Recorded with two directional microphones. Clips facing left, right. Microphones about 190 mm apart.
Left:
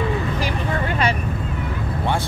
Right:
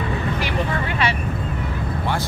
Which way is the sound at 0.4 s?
40° left (ahead or behind).